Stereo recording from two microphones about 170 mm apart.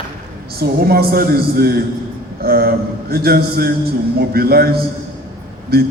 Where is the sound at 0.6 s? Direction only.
65° right (ahead or behind).